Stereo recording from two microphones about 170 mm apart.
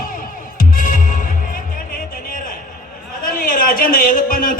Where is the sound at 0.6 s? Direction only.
55° left (ahead or behind).